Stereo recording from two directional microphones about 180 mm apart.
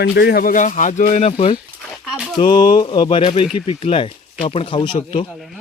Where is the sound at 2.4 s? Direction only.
25° left (ahead or behind).